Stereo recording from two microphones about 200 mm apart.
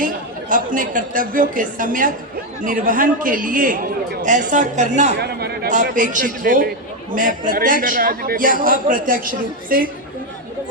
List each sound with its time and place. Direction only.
0.0 s a man's voice: 40° right (ahead or behind)
5.1 s a man's voice: 55° right (ahead or behind)
5.7 s a man's voice: 40° right (ahead or behind)